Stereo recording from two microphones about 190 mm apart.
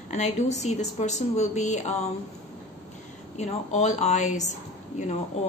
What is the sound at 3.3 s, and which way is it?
A woman's voice, 40° left (ahead or behind).